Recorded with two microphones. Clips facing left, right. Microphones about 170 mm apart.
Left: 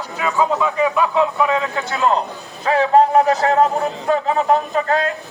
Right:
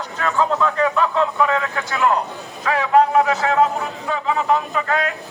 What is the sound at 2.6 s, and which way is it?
A man's voice, 30° left (ahead or behind).